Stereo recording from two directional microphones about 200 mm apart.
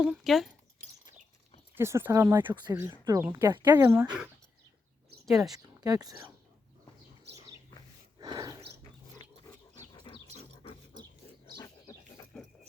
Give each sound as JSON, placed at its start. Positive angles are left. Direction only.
{"t": 0.0, "sound": "speech", "side_deg": 0}
{"t": 1.7, "sound": "speech", "side_deg": -10}
{"t": 5.2, "sound": "speech", "side_deg": 0}
{"t": 5.6, "sound": "speech", "side_deg": -20}
{"t": 7.3, "sound": "bird", "side_deg": -55}
{"t": 8.2, "sound": "a sound", "side_deg": -20}
{"t": 9.1, "sound": "dog", "side_deg": 20}
{"t": 11.5, "sound": "dog", "side_deg": 15}